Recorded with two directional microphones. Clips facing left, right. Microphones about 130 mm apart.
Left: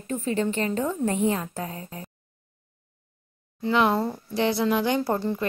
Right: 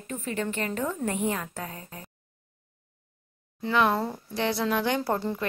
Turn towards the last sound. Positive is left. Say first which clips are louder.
# left 3 dB
turn(degrees=10)  # may be behind; listen again after turning